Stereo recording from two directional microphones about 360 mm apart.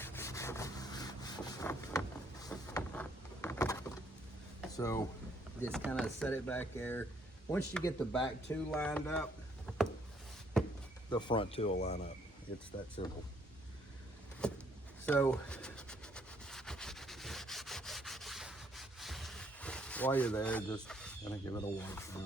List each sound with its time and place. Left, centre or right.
0.0 s wood: centre
4.8 s speech: centre
5.6 s speech: centre
9.7 s a sound: centre
11.1 s speech: centre
14.4 s a sound: centre